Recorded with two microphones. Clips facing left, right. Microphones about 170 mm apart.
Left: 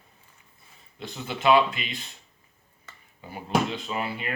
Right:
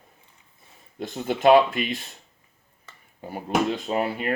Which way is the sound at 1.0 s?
50° right (ahead or behind).